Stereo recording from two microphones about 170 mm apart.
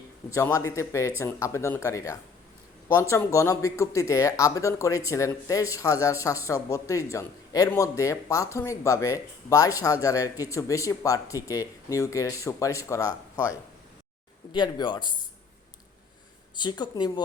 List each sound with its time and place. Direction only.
0.3 s speech: 15° left (ahead or behind)
16.6 s speech: 25° left (ahead or behind)